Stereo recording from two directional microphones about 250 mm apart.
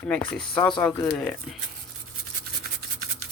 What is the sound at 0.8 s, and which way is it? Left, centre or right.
Speech, centre.